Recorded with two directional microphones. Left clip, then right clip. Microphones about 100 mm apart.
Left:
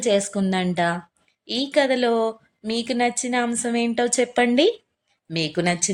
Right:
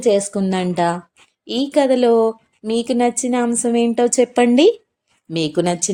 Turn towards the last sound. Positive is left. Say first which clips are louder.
# right 4 dB
turn(degrees=-35)  # may be behind; listen again after turning